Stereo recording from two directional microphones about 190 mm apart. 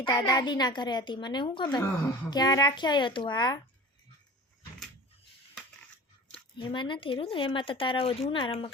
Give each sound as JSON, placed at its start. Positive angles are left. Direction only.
{"t": 0.0, "sound": "speech", "side_deg": 20}
{"t": 6.3, "sound": "speech", "side_deg": 25}